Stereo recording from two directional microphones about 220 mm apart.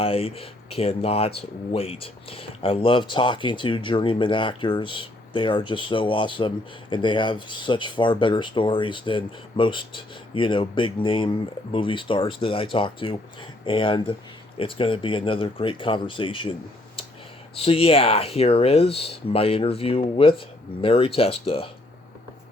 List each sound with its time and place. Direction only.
0.0 s speech: 25° left (ahead or behind)